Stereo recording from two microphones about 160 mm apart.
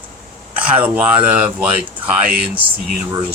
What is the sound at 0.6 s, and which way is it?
Speech, 10° right (ahead or behind).